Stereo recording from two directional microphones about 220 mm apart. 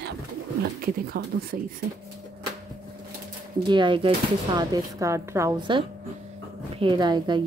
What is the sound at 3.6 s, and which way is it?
A woman's voice, 20° right (ahead or behind).